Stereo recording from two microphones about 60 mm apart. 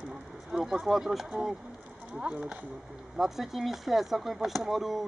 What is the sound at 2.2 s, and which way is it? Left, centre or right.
Speech, centre.